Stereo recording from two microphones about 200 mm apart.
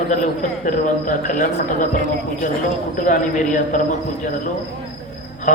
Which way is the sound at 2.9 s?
40° left (ahead or behind).